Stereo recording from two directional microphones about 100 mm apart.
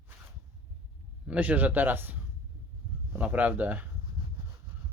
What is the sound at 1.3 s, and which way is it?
Speech, 15° right (ahead or behind).